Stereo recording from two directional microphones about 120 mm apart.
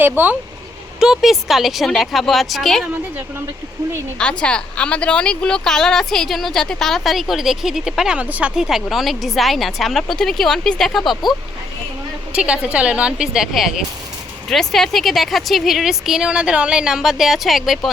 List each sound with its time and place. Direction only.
0.0 s a woman's voice: 15° right (ahead or behind)
0.9 s speech: 5° right (ahead or behind)
4.2 s speech: 10° left (ahead or behind)
12.3 s a woman's voice: 10° right (ahead or behind)